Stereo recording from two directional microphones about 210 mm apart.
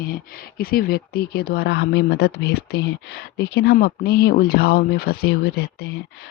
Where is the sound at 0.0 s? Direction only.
45° left (ahead or behind).